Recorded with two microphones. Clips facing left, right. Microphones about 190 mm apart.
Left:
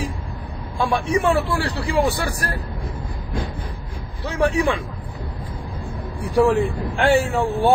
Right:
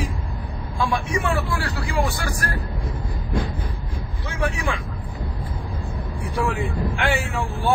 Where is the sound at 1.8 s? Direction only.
35° left (ahead or behind).